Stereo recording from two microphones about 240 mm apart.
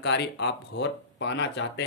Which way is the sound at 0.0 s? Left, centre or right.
Left.